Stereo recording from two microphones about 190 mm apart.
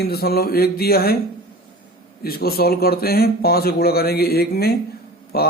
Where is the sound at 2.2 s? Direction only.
55° left (ahead or behind).